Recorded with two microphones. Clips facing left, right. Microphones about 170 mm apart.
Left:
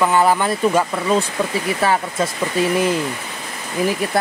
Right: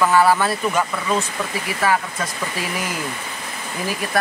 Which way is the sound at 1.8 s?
25° left (ahead or behind).